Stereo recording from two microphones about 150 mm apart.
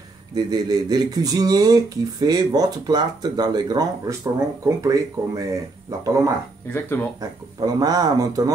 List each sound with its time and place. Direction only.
0.3 s speech: 25° right (ahead or behind)
6.7 s speech: 15° left (ahead or behind)
7.2 s speech: 25° right (ahead or behind)